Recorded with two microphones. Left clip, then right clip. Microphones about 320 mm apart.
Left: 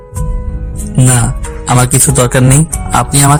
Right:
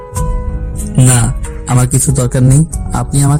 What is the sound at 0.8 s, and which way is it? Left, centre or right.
Speech, centre.